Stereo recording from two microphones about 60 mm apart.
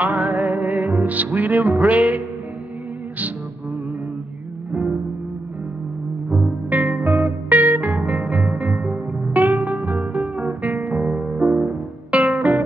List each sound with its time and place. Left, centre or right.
0.0 s music: right
6.7 s music: right
8.6 s music: centre
9.3 s music: right